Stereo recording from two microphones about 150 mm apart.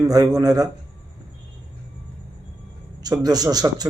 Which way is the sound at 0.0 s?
25° right (ahead or behind).